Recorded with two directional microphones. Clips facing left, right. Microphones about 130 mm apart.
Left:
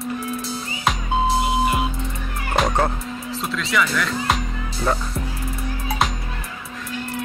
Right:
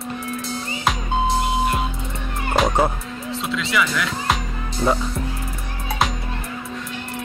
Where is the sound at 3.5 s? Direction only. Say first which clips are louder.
Even; centre (ahead or behind).